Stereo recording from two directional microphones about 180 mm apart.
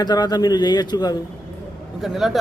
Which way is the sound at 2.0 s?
Centre (ahead or behind).